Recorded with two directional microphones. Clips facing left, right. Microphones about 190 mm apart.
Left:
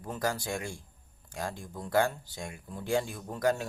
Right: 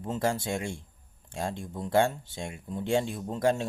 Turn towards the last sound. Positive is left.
turn(degrees=-25)  # may be behind; listen again after turning